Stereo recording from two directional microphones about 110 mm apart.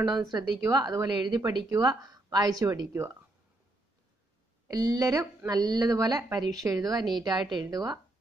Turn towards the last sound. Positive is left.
turn(degrees=-35)  # may be behind; listen again after turning